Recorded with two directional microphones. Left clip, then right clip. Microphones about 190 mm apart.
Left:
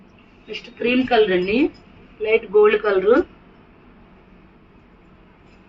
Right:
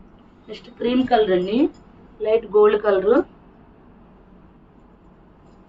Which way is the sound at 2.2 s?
25° right (ahead or behind).